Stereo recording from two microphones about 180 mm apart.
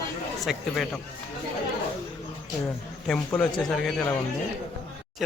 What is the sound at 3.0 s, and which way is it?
Speech, 5° left (ahead or behind).